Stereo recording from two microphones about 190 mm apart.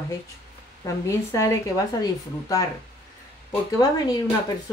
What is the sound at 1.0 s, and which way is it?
A woman's voice, 15° left (ahead or behind).